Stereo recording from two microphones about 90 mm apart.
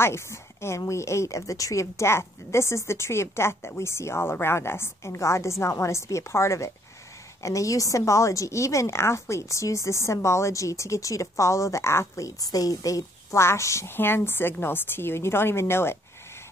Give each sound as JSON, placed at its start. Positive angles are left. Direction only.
{"t": 0.0, "sound": "a woman's voice", "side_deg": 30}